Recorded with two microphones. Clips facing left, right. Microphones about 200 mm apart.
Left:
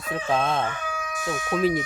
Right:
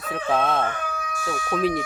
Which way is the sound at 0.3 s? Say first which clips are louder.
Right 2 dB; centre (ahead or behind).